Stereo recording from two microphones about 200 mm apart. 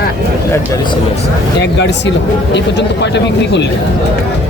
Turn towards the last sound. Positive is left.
turn(degrees=60)  # may be behind; listen again after turning